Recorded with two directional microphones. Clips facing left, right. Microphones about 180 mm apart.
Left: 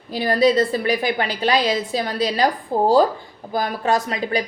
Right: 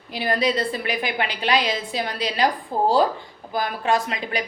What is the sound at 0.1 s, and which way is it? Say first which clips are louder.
Speech: left 6 dB; 40° left (ahead or behind).